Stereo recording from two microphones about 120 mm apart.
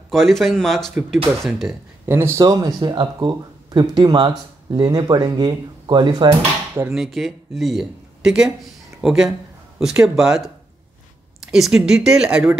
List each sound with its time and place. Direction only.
0.1 s speech: centre (ahead or behind)
2.0 s speech: 20° right (ahead or behind)
2.4 s speech: 35° right (ahead or behind)
6.9 s speech: centre (ahead or behind)